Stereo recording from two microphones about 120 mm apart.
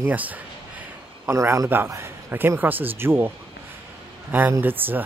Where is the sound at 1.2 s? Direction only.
25° right (ahead or behind).